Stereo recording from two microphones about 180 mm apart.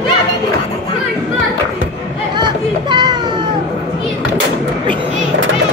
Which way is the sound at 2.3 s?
25° right (ahead or behind).